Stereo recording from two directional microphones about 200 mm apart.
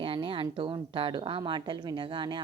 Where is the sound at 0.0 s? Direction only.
25° right (ahead or behind).